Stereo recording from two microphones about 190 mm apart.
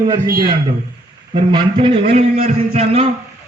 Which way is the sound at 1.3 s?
25° right (ahead or behind).